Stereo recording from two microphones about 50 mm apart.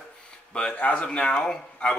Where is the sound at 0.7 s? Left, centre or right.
Left.